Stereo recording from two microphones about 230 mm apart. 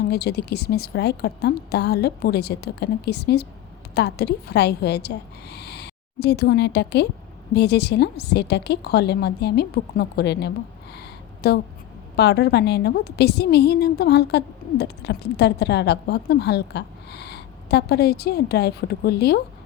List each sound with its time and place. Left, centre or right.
0.0 s a woman's voice: left
10.9 s a sound: left
12.1 s a woman's voice: left